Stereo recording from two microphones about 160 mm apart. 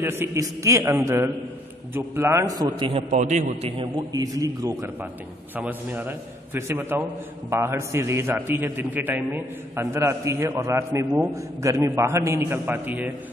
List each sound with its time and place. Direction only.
0.0 s a man's voice: 15° right (ahead or behind)
3.1 s a man's voice: 50° right (ahead or behind)
3.7 s a man's voice: 30° right (ahead or behind)
5.6 s a man's voice: 10° right (ahead or behind)